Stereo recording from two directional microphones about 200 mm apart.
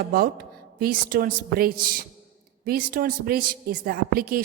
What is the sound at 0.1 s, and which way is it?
A woman's voice, 50° right (ahead or behind).